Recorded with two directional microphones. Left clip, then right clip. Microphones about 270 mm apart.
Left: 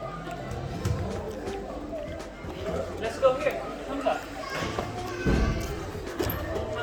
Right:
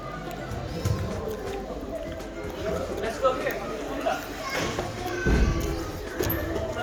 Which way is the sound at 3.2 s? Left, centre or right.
Left.